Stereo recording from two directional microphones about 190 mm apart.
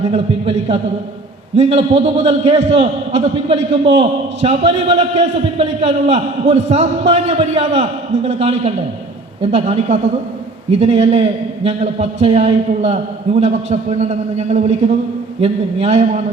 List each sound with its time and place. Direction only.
0.0 s a man's voice: 35° right (ahead or behind)